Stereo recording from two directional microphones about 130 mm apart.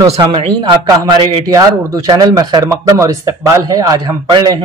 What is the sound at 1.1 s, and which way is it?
A man's voice, 25° right (ahead or behind).